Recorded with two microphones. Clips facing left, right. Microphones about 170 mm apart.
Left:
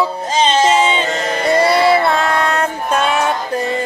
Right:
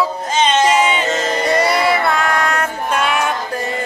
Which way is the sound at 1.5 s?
25° left (ahead or behind).